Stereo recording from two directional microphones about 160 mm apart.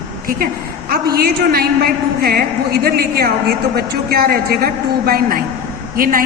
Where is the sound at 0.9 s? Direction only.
75° right (ahead or behind).